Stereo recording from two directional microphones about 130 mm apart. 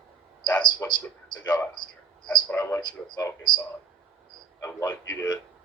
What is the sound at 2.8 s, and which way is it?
Speech, 30° left (ahead or behind).